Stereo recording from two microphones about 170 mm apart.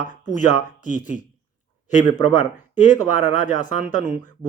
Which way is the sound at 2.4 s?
45° left (ahead or behind).